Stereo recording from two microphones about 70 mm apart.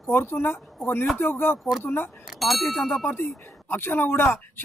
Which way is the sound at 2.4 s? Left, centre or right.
Centre.